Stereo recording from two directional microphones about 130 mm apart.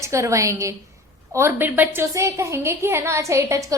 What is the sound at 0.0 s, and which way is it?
A woman's voice, 25° right (ahead or behind).